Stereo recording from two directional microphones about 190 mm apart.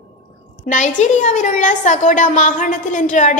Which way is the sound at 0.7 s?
40° left (ahead or behind).